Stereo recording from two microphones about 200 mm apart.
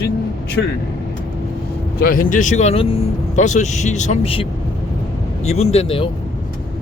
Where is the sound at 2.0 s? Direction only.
45° left (ahead or behind); by 6.1 s 25° left (ahead or behind).